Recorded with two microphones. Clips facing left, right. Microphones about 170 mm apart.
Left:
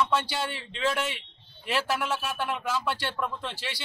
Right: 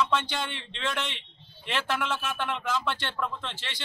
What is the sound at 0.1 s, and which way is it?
A man's voice, 5° left (ahead or behind).